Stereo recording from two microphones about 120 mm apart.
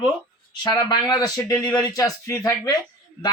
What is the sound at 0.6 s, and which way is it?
Speech, 40° left (ahead or behind).